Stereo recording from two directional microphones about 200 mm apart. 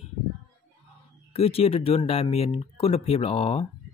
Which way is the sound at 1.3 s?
30° left (ahead or behind).